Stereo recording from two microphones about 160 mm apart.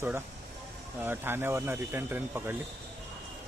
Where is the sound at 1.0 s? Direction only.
15° right (ahead or behind).